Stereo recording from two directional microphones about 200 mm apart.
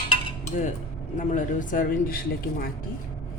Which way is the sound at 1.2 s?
40° left (ahead or behind).